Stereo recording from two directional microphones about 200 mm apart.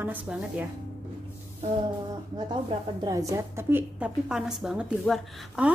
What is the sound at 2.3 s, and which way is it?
A woman's voice, 20° right (ahead or behind).